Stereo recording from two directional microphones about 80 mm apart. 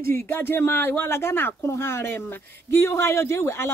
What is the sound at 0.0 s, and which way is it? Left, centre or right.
A woman's voice, left.